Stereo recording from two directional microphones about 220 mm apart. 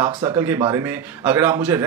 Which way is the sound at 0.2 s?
20° right (ahead or behind).